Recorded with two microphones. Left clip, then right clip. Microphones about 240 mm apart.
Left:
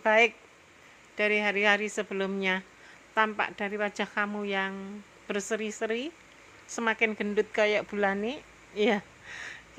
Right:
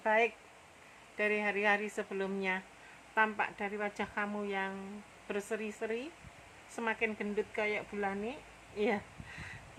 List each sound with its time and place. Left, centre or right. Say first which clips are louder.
0.0 s speech: left 7 dB; centre